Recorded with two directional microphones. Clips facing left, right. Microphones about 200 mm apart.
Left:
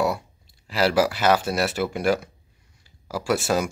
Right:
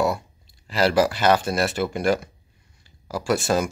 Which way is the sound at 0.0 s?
10° left (ahead or behind).